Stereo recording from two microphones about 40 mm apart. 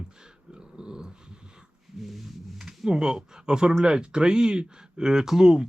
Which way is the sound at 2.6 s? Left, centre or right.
Centre.